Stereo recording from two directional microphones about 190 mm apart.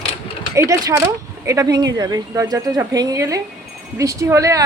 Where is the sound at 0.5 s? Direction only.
15° right (ahead or behind).